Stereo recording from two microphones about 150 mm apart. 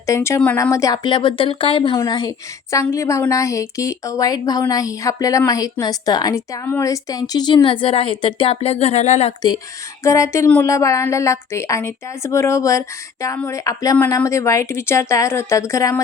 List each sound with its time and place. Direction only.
0.0 s a woman's voice: 20° left (ahead or behind); by 9.3 s 50° left (ahead or behind)
10.0 s speech: 20° left (ahead or behind)